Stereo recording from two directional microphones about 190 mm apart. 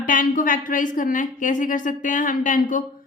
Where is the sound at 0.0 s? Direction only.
45° left (ahead or behind).